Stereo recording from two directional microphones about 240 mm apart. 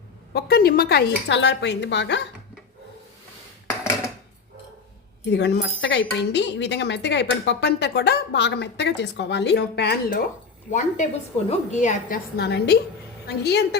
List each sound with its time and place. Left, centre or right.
0.3 s speech: left
5.3 s a woman's voice: left